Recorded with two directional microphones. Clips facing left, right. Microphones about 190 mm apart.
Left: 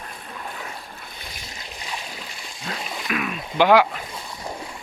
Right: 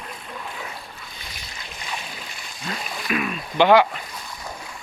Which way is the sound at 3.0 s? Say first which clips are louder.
Right 2 dB; centre (ahead or behind).